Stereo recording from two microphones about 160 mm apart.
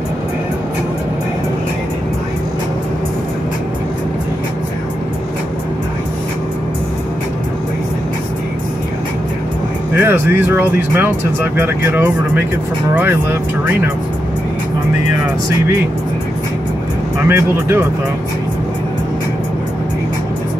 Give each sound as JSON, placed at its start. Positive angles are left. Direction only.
{"t": 9.9, "sound": "speech", "side_deg": -15}
{"t": 17.3, "sound": "speech", "side_deg": -15}